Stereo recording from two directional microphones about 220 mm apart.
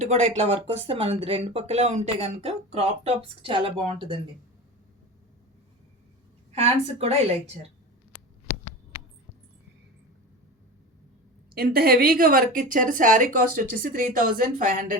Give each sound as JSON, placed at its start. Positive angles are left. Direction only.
{"t": 0.0, "sound": "speech", "side_deg": -30}
{"t": 6.5, "sound": "speech", "side_deg": -30}
{"t": 11.5, "sound": "speech", "side_deg": -45}